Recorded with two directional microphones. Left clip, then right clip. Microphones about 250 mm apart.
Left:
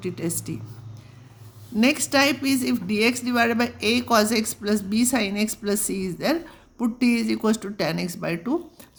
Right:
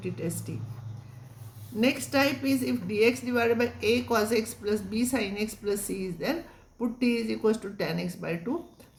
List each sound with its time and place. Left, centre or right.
0.0 s a woman's voice: left
1.8 s a woman's voice: left